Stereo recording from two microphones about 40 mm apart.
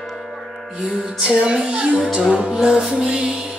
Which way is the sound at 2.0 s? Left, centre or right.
Centre.